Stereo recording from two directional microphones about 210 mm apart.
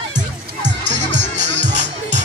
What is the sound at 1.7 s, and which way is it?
Music, 35° right (ahead or behind).